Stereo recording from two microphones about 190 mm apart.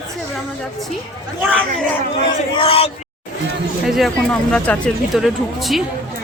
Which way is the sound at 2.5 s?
30° left (ahead or behind).